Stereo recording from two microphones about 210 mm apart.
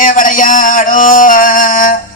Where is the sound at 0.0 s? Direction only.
40° left (ahead or behind).